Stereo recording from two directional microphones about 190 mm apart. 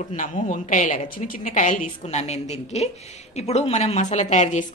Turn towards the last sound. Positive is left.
turn(degrees=40)  # may be behind; listen again after turning